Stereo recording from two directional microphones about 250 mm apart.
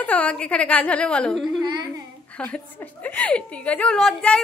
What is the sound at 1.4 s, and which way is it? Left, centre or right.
Speech, centre.